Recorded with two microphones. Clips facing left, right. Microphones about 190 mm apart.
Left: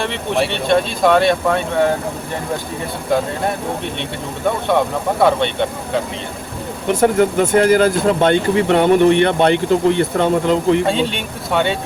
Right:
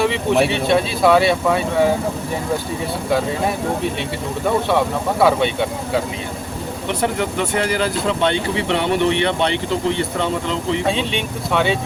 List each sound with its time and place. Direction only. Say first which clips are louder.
0.0 s speech: right 3 dB; 5° right (ahead or behind)
5.2 s speech: left 1 dB; 5° right (ahead or behind)
6.8 s speech: left 8 dB; 45° left (ahead or behind)
10.8 s speech: left 2 dB; centre (ahead or behind)